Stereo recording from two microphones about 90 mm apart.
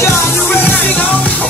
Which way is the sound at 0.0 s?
25° left (ahead or behind).